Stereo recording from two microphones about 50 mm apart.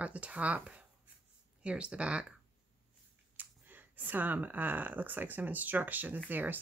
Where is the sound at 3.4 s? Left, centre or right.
Right.